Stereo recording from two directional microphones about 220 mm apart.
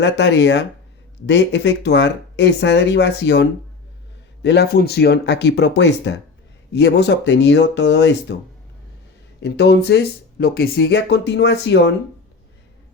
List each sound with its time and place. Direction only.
0.0 s speech: 50° left (ahead or behind)
4.4 s speech: 50° left (ahead or behind)
9.4 s speech: 50° left (ahead or behind)